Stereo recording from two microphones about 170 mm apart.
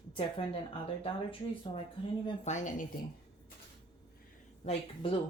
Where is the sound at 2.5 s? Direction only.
45° left (ahead or behind).